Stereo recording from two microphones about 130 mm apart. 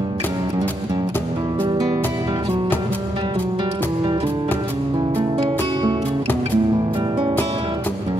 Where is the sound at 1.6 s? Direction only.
35° right (ahead or behind).